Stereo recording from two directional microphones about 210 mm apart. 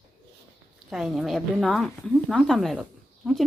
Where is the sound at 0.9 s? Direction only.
Centre (ahead or behind).